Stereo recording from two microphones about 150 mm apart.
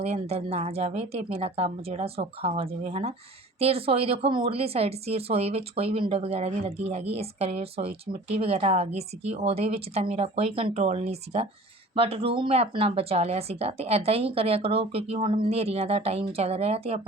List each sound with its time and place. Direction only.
0.0 s speech: 45° right (ahead or behind)